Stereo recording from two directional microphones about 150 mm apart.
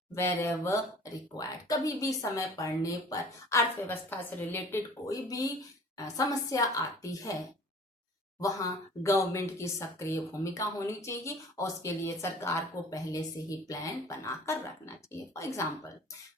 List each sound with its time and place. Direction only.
0.1 s speech: 20° left (ahead or behind)
8.4 s speech: 20° left (ahead or behind)